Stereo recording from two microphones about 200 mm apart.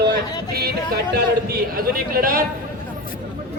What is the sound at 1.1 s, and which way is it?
A man's voice, 50° right (ahead or behind).